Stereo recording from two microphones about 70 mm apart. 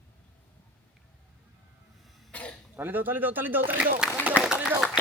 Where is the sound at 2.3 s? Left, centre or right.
Centre.